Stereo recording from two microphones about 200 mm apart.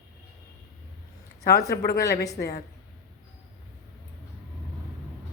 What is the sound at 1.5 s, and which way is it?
Speech, 55° left (ahead or behind).